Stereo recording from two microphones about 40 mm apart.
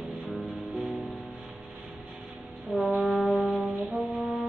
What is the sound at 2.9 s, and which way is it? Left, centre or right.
Brass instrument, right.